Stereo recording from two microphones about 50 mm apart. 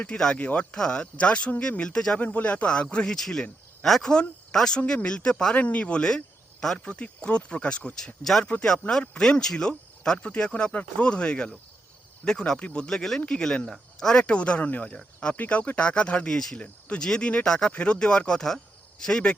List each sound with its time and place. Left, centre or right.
0.3 s speech: left
1.8 s speech: centre
2.1 s speech: left
3.2 s speech: centre
5.5 s speech: left
6.0 s speech: centre
7.9 s speech: centre
14.3 s speech: left
15.4 s speech: left; by 17.7 s centre
17.7 s speech: left